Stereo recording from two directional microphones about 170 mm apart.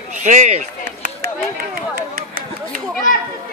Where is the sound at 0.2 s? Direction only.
45° right (ahead or behind).